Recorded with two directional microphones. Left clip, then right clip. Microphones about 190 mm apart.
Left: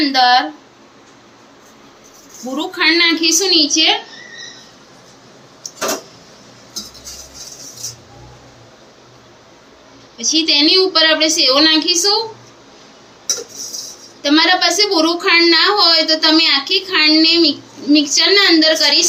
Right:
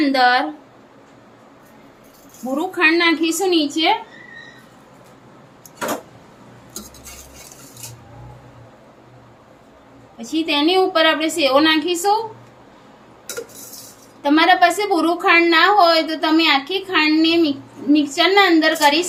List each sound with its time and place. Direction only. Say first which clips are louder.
0.0 s speech: left 3 dB; 50° right (ahead or behind)
2.7 s a woman's voice: left 3 dB; 35° right (ahead or behind)
10.2 s a woman's voice: left 6 dB; 50° right (ahead or behind)
14.2 s a woman's voice: left 1 dB; 40° right (ahead or behind)